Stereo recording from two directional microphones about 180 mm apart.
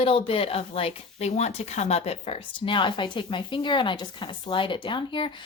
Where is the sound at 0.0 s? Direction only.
30° left (ahead or behind).